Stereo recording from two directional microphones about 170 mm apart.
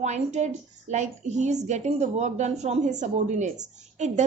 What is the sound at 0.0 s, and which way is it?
A woman's voice, 40° right (ahead or behind).